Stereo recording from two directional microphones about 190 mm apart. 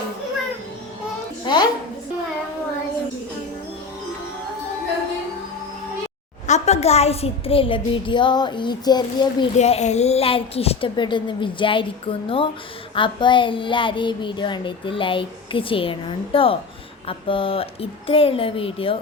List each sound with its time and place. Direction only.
1.5 s a sound: 25° left (ahead or behind)
6.5 s child singing: 35° left (ahead or behind)
9.6 s child singing: 35° left (ahead or behind)